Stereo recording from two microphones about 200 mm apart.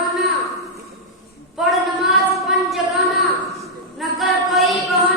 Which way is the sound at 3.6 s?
Centre (ahead or behind).